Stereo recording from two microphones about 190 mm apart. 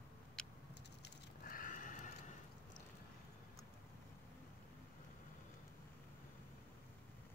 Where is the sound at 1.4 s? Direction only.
45° left (ahead or behind).